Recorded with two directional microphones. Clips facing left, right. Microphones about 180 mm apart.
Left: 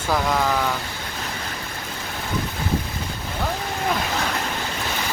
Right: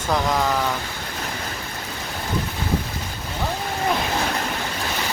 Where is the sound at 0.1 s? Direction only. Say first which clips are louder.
Even; centre (ahead or behind).